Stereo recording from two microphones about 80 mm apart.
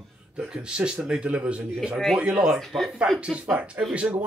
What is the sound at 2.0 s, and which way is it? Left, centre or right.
Speech, centre.